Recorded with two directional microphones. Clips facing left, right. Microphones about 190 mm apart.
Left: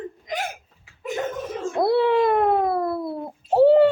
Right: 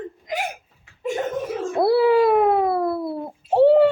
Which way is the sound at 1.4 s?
5° right (ahead or behind).